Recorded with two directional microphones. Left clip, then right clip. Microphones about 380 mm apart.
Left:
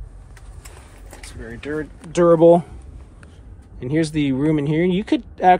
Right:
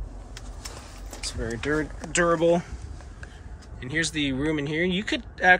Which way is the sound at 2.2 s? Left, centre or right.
Centre.